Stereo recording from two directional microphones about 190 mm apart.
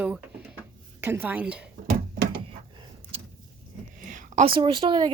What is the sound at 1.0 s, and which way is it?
Speech, 10° right (ahead or behind).